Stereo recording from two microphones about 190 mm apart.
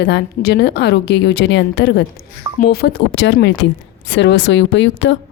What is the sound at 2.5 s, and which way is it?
A woman's voice, 50° left (ahead or behind).